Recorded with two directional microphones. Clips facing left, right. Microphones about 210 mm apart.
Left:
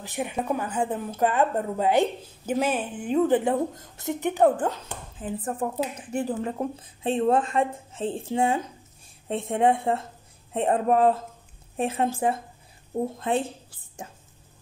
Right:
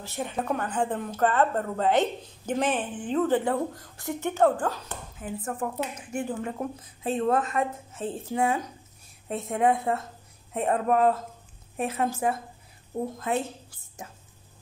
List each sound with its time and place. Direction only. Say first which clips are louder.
0.0 s a woman's voice: left 2 dB; 15° left (ahead or behind)
5.2 s a woman's voice: left 3 dB; 35° left (ahead or behind)